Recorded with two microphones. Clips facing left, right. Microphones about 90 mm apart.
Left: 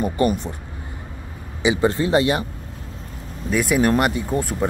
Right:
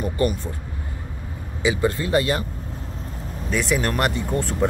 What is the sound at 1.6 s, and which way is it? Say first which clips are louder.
Speech: left 3 dB; 20° left (ahead or behind).